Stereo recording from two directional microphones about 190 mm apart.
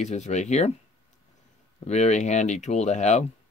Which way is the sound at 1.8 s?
35° left (ahead or behind).